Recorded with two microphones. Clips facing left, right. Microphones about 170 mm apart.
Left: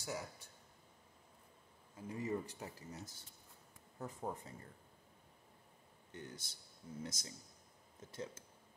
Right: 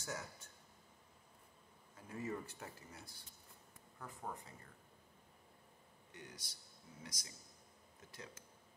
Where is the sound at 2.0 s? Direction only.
15° left (ahead or behind).